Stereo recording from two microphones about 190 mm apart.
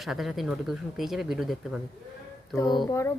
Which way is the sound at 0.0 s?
Centre (ahead or behind).